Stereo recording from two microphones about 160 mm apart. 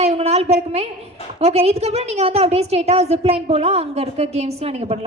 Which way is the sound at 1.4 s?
40° right (ahead or behind).